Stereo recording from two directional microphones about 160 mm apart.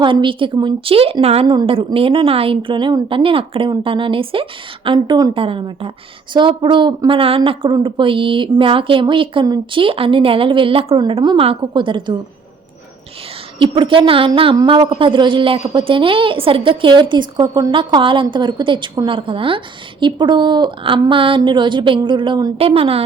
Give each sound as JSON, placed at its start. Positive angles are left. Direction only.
{"t": 0.0, "sound": "a woman's voice", "side_deg": -30}
{"t": 13.6, "sound": "a woman's voice", "side_deg": -30}
{"t": 22.5, "sound": "a woman's voice", "side_deg": -35}